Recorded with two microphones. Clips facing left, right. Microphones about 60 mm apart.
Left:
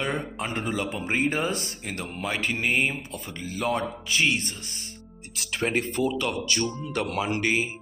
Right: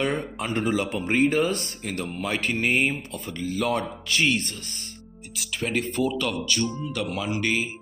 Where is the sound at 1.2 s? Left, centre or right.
Left.